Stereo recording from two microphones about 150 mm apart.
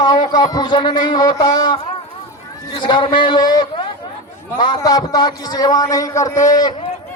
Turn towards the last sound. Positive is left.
turn(degrees=25)  # may be behind; listen again after turning